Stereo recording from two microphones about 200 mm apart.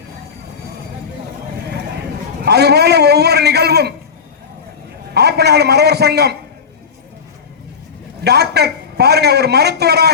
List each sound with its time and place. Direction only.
2.4 s a man's voice: 55° right (ahead or behind)
5.1 s a man's voice: 55° right (ahead or behind)
8.2 s a man's voice: 55° right (ahead or behind)